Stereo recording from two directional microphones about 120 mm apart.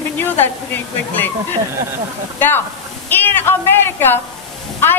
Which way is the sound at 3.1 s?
15° left (ahead or behind).